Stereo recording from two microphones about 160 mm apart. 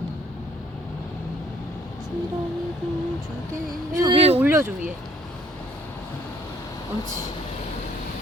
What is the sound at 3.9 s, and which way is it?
Speech, 20° right (ahead or behind).